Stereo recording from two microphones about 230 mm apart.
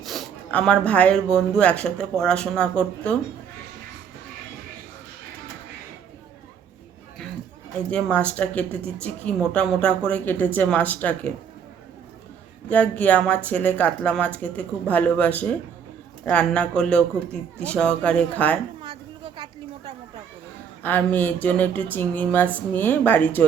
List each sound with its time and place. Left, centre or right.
0.0 s speech: centre
7.9 s speech: centre
12.6 s speech: centre
18.8 s a sound: centre
20.8 s speech: centre